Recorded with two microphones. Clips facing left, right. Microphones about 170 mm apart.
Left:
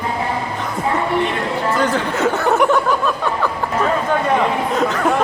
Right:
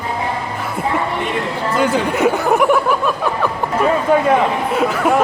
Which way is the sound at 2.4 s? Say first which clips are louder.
Right 1 dB; centre (ahead or behind).